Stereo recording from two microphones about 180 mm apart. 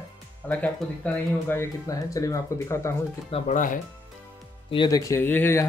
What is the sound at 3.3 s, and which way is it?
Speech, 30° left (ahead or behind).